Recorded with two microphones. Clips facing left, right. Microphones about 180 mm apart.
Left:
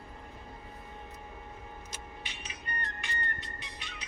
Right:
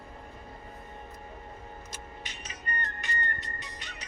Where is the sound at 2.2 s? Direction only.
40° right (ahead or behind).